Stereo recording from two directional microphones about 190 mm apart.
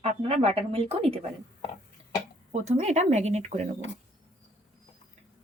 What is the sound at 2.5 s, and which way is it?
Speech, 35° right (ahead or behind).